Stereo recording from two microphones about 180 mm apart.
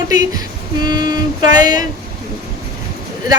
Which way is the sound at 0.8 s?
25° right (ahead or behind).